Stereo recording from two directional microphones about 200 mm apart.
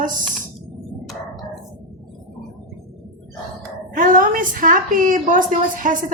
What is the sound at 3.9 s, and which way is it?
A woman's voice, 40° right (ahead or behind).